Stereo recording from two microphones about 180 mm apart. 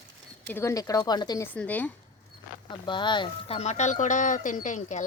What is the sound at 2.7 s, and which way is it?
Speech, 25° left (ahead or behind).